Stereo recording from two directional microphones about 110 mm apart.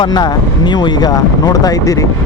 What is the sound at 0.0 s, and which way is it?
Speech, 40° left (ahead or behind).